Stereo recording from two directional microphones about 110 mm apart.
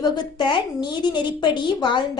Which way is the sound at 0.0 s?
45° left (ahead or behind).